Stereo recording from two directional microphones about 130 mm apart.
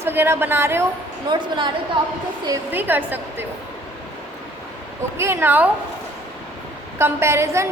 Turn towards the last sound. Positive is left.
turn(degrees=-20)  # may be behind; listen again after turning